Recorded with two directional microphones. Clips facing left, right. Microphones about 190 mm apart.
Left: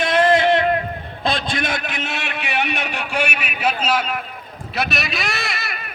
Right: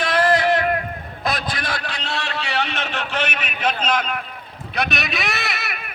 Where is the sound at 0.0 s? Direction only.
25° left (ahead or behind).